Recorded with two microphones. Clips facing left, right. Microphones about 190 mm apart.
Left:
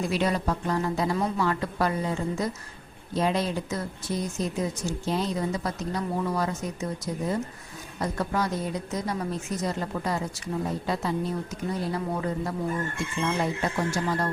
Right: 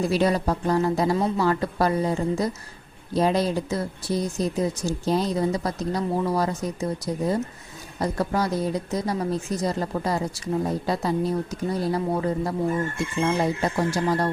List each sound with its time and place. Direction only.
0.0 s speech: 35° right (ahead or behind)